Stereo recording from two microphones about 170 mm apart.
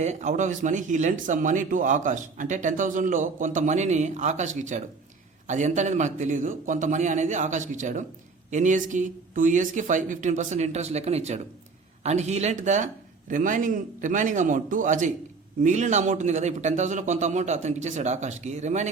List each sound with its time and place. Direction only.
0.0 s speech: 45° right (ahead or behind)